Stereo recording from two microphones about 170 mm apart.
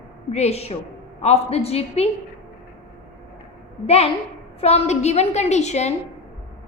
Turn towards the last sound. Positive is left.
turn(degrees=40)  # may be behind; listen again after turning